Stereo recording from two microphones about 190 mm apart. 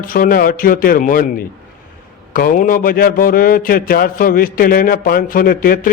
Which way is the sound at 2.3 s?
45° left (ahead or behind).